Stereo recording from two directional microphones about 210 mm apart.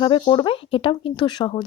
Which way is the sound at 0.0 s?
20° left (ahead or behind).